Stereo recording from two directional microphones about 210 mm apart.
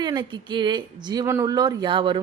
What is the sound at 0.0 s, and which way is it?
A woman's voice, 20° right (ahead or behind).